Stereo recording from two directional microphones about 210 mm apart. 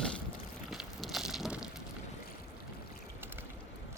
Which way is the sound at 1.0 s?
Centre (ahead or behind).